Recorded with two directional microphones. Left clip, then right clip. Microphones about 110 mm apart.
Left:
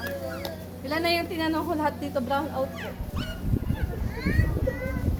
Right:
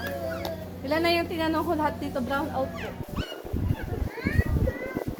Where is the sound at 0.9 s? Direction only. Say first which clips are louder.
Right 1 dB; 40° right (ahead or behind).